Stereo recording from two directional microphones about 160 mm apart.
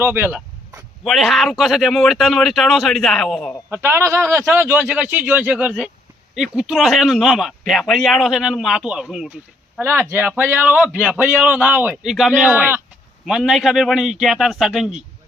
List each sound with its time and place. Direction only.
0.0 s a sound: 10° right (ahead or behind)
1.0 s speech: centre (ahead or behind)
3.7 s a man's voice: 15° right (ahead or behind)